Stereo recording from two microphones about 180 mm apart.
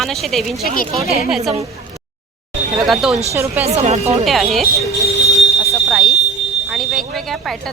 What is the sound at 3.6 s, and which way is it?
Speech, 35° right (ahead or behind).